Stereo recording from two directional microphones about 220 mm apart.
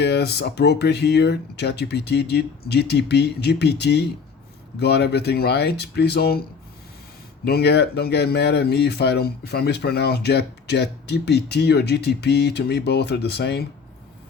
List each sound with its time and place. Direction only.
0.0 s speech: 50° left (ahead or behind)
7.4 s speech: 45° left (ahead or behind)